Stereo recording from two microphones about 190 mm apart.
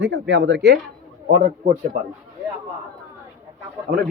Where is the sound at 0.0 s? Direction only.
70° right (ahead or behind).